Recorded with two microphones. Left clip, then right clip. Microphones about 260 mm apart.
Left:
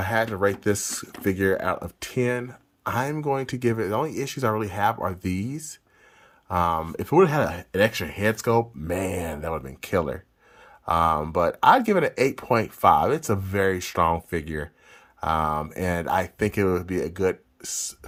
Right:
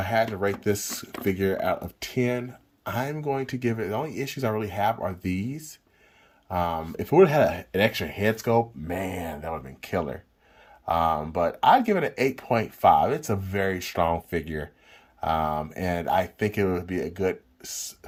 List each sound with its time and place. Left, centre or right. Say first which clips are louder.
0.0 s speech: left 1 dB; centre